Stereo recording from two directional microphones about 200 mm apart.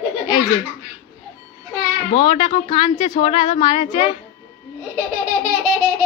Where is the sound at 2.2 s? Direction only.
25° left (ahead or behind).